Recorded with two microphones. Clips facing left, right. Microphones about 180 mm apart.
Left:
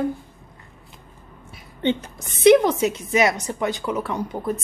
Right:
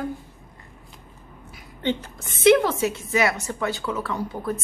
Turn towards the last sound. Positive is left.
turn(degrees=20)  # may be behind; listen again after turning